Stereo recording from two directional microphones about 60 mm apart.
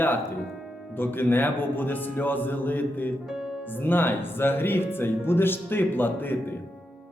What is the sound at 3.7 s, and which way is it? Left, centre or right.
Speech, left.